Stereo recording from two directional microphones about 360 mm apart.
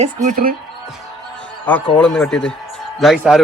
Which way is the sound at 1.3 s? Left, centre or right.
Centre.